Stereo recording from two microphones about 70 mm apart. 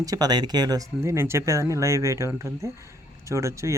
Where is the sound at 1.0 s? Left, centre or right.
Right.